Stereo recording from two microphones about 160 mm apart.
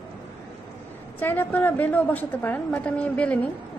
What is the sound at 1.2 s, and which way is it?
A woman's voice, 10° left (ahead or behind).